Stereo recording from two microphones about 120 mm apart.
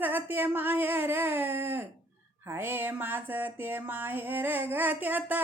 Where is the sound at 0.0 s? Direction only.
15° right (ahead or behind).